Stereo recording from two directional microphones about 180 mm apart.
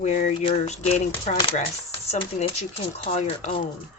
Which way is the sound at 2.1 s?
35° left (ahead or behind).